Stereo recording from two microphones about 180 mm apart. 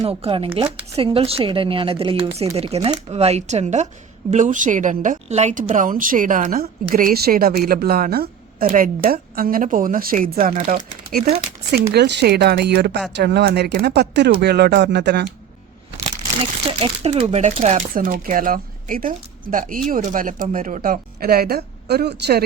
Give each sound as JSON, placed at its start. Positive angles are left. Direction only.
{"t": 0.0, "sound": "a woman's voice", "side_deg": -35}
{"t": 11.7, "sound": "speech", "side_deg": -65}
{"t": 16.8, "sound": "a woman's voice", "side_deg": -30}